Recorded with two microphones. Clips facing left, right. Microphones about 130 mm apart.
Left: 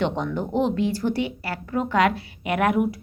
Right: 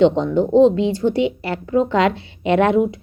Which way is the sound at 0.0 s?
20° right (ahead or behind).